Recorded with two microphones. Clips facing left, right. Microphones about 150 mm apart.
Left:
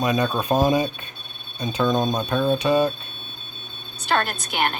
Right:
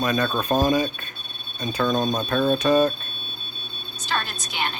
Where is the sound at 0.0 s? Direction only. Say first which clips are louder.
Left 1 dB; 20° left (ahead or behind).